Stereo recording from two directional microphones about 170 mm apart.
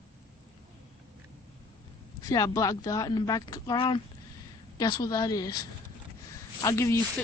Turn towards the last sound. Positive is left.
turn(degrees=15)  # may be behind; listen again after turning